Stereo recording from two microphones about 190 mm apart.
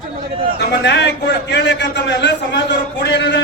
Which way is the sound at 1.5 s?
65° left (ahead or behind).